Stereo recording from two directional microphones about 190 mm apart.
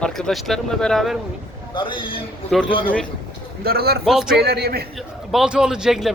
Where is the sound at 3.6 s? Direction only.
55° right (ahead or behind).